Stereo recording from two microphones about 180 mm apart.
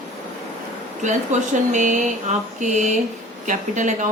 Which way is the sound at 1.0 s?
40° right (ahead or behind).